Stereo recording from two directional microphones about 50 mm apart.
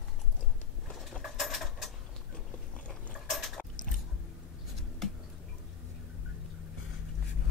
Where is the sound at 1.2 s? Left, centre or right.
Centre.